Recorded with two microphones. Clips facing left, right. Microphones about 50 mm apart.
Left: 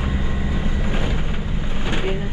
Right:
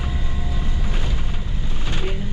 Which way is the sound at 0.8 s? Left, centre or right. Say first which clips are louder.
Left 5 dB; left.